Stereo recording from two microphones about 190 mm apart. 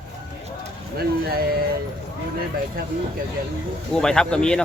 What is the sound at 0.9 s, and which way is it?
Speech, 55° right (ahead or behind).